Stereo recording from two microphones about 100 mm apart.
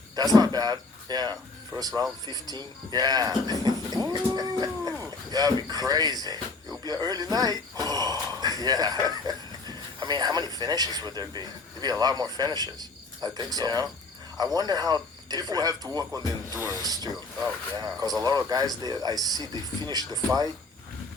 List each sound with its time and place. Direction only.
0.2 s speech: 40° right (ahead or behind)
7.8 s a sound: 40° right (ahead or behind)
10.0 s speech: 45° right (ahead or behind)